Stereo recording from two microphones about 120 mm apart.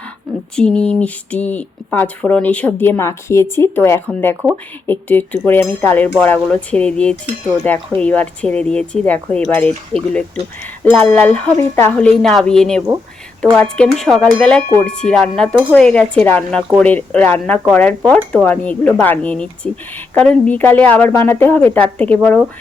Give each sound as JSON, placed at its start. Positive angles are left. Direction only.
{"t": 0.5, "sound": "speech", "side_deg": 5}
{"t": 10.8, "sound": "speech", "side_deg": 15}